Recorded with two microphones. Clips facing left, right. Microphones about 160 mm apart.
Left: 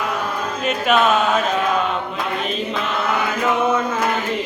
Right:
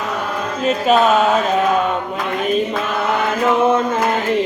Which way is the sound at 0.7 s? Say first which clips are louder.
Right 4 dB; 35° right (ahead or behind).